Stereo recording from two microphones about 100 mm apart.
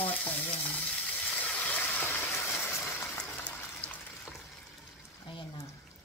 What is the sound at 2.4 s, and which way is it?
Vehicle, 25° left (ahead or behind).